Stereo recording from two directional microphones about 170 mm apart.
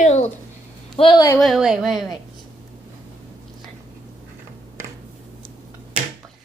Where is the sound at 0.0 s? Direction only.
45° left (ahead or behind).